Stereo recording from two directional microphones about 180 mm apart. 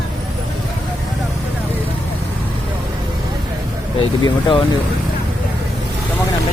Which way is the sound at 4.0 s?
25° left (ahead or behind).